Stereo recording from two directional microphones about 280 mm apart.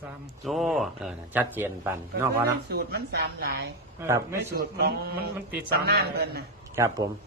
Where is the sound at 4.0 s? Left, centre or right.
Centre.